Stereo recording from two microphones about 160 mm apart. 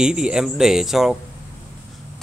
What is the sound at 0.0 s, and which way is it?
Speech, 5° right (ahead or behind).